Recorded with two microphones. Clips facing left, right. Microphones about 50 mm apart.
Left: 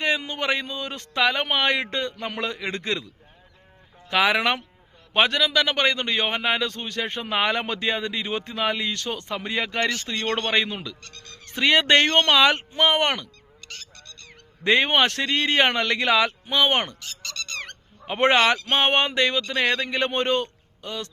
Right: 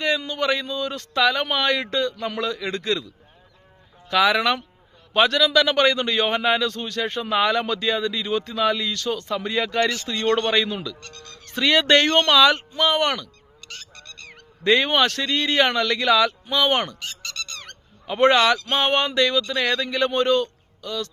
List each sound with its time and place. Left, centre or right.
0.0 s a man's voice: left
4.1 s a man's voice: left
5.1 s a man's voice: centre
14.6 s a man's voice: left
18.0 s a man's voice: left